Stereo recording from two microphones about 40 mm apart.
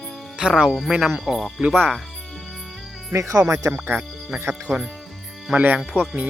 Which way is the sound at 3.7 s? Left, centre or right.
Right.